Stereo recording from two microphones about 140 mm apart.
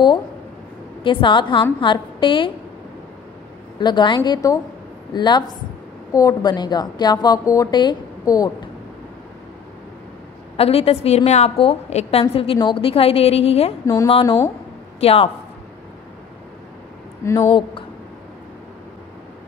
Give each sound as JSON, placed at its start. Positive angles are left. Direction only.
{"t": 1.0, "sound": "a woman's voice", "side_deg": 35}
{"t": 3.8, "sound": "a woman's voice", "side_deg": 35}
{"t": 10.6, "sound": "a woman's voice", "side_deg": 45}
{"t": 15.0, "sound": "speech", "side_deg": 45}
{"t": 17.2, "sound": "a woman's voice", "side_deg": 20}
{"t": 17.5, "sound": "a woman's voice", "side_deg": 40}